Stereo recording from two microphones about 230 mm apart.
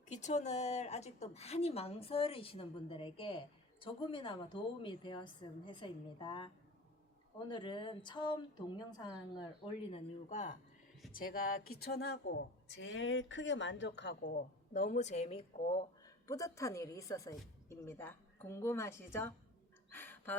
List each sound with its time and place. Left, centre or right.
0.1 s a woman's voice: left
14.2 s speech: left
16.0 s a woman's voice: centre
19.9 s a sound: centre